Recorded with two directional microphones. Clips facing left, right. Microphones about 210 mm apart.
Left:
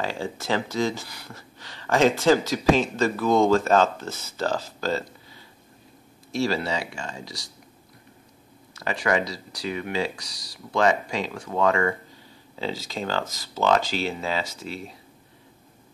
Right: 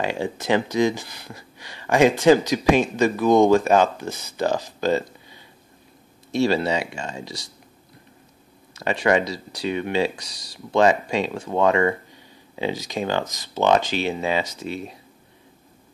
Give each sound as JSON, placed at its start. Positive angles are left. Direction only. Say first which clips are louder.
{"t": 0.0, "sound": "speech", "louder": "right 4 dB", "side_deg": -20}
{"t": 8.7, "sound": "speech", "louder": "right 4 dB", "side_deg": -25}